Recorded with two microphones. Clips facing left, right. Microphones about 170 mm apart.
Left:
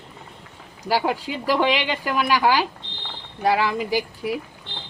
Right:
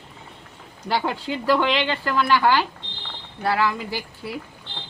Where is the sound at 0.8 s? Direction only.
10° left (ahead or behind).